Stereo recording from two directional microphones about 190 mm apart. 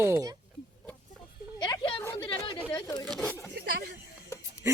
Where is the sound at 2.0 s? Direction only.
15° left (ahead or behind).